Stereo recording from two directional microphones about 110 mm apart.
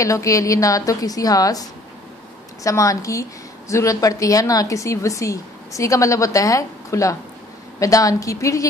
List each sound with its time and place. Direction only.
0.0 s a woman's voice: 30° left (ahead or behind)